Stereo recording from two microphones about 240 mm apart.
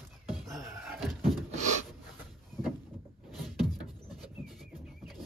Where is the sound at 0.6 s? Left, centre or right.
Centre.